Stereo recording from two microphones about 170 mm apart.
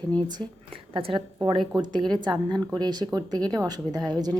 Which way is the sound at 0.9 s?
30° right (ahead or behind).